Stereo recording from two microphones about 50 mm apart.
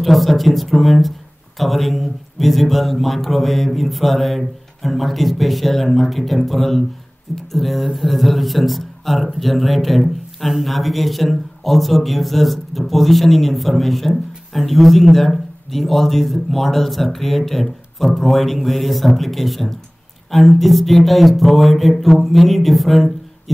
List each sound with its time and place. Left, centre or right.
0.0 s a man's voice: centre